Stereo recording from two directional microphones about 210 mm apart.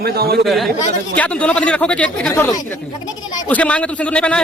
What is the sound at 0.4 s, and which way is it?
Speech, centre (ahead or behind).